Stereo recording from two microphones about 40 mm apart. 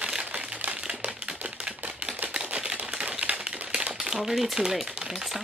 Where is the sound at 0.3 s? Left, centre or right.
Right.